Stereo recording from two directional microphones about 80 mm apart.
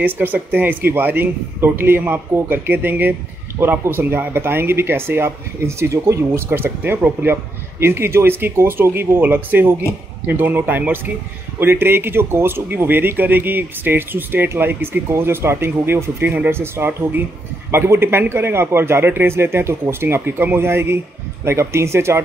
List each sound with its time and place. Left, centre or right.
0.0 s a man's voice: right